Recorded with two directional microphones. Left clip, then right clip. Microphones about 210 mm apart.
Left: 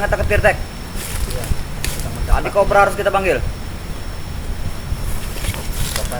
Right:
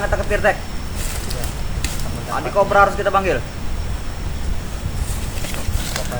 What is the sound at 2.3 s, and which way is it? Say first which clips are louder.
Speech: left 1 dB; 5° left (ahead or behind).